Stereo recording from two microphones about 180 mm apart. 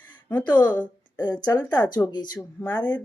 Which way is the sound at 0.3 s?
10° left (ahead or behind).